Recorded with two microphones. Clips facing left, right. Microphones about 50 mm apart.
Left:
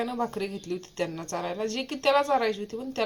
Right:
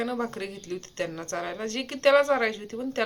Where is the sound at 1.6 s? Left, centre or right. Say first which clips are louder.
Right 3 dB; right.